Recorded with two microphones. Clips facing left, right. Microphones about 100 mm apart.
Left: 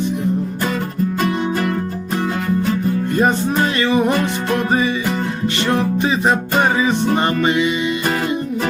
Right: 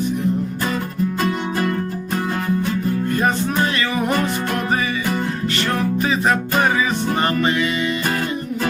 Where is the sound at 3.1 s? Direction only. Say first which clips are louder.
Left 4 dB; 30° left (ahead or behind).